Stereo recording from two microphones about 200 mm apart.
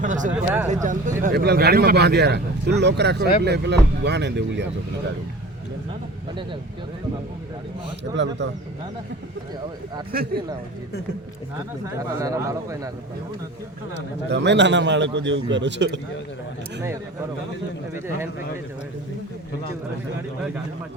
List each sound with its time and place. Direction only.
0.0 s speech: 40° right (ahead or behind)
0.3 s a man's voice: 10° right (ahead or behind)
0.7 s speech: 40° right (ahead or behind); by 4.7 s 60° right (ahead or behind)
8.1 s speech: 65° right (ahead or behind)
11.9 s a man's voice: 15° right (ahead or behind)
14.3 s speech: 60° right (ahead or behind)
17.9 s a man's voice: 10° right (ahead or behind)